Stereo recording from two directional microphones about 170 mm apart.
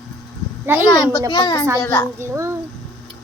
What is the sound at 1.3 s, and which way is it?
Speech, 25° left (ahead or behind).